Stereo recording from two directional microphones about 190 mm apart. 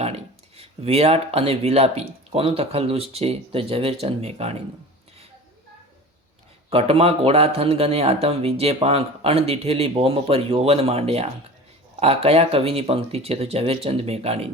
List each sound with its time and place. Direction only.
0.0 s speech: 30° right (ahead or behind)
6.7 s speech: 30° right (ahead or behind)